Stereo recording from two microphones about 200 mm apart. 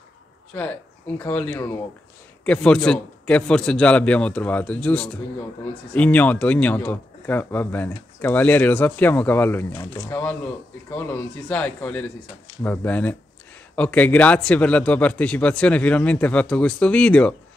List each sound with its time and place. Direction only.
0.5 s a man's voice: 5° left (ahead or behind)